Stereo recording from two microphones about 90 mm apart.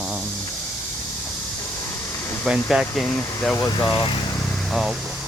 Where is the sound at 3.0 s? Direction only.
15° left (ahead or behind).